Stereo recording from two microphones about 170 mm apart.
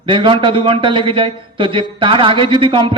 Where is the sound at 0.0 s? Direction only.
30° right (ahead or behind).